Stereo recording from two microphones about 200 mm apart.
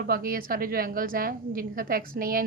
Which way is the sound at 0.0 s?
45° right (ahead or behind).